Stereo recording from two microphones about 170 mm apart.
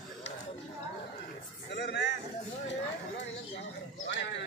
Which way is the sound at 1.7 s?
80° left.